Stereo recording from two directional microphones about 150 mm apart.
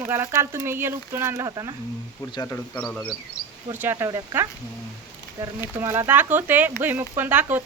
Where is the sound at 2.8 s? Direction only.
5° left (ahead or behind).